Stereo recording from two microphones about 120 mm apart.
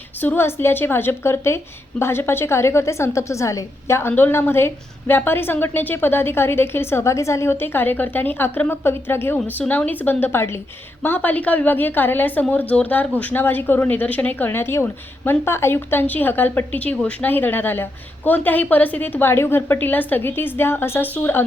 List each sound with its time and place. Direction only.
0.2 s a woman's voice: 15° left (ahead or behind)